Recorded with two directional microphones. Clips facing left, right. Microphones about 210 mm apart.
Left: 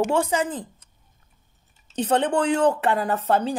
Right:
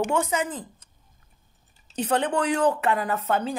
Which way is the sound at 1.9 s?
30° left (ahead or behind).